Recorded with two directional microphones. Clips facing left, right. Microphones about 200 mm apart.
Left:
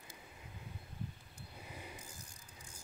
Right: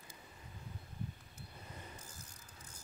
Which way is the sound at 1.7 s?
10° left (ahead or behind).